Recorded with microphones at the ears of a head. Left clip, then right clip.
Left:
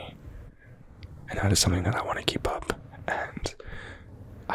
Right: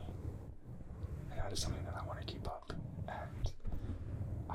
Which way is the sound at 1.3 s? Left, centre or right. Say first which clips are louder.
Left 17 dB; left.